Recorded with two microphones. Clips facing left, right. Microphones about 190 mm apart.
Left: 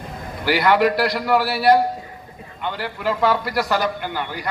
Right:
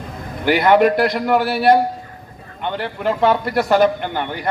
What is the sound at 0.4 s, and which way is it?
A man's voice, 50° right (ahead or behind).